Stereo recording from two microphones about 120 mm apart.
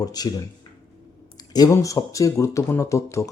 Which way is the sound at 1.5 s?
30° left (ahead or behind).